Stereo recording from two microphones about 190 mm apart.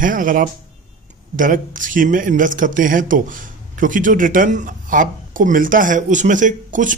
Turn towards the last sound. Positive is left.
turn(degrees=-40)  # may be behind; listen again after turning